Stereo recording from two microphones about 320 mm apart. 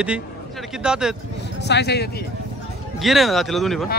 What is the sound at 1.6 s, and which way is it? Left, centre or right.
Speech, left.